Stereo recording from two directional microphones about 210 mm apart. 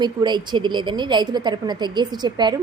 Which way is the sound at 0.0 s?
20° right (ahead or behind).